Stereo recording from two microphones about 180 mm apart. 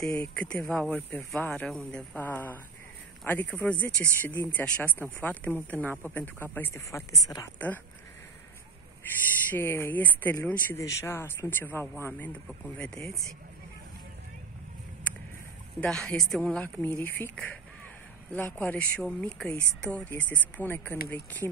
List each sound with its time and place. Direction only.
0.3 s a woman's voice: 5° left (ahead or behind)
9.5 s speech: 15° left (ahead or behind)
15.8 s speech: 5° left (ahead or behind)